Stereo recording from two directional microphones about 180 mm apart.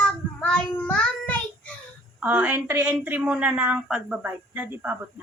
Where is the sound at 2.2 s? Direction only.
10° right (ahead or behind).